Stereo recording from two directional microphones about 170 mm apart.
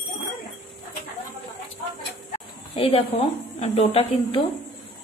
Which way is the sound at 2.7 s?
35° left (ahead or behind).